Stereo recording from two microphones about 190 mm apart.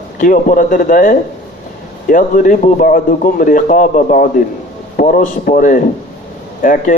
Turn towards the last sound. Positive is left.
turn(degrees=45)  # may be behind; listen again after turning